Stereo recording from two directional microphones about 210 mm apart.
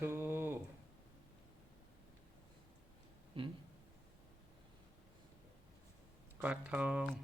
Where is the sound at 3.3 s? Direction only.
25° right (ahead or behind).